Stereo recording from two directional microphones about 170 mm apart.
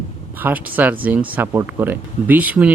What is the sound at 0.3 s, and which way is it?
Speech, 10° right (ahead or behind).